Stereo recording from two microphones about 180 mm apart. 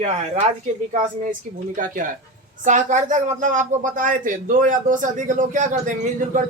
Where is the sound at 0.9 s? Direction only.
45° right (ahead or behind).